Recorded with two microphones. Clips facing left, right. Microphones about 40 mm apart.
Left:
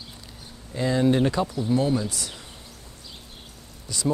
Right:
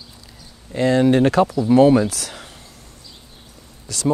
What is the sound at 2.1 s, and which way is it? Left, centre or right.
Speech, right.